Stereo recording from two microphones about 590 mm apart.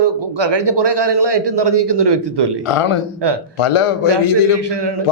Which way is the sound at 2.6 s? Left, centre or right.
Left.